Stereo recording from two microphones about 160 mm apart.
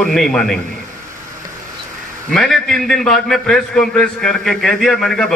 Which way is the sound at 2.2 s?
5° left (ahead or behind).